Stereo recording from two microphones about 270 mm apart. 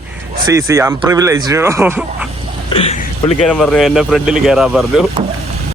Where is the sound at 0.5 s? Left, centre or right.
Centre.